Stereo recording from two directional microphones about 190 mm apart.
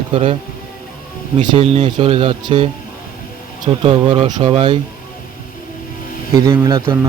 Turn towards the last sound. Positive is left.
turn(degrees=-20)  # may be behind; listen again after turning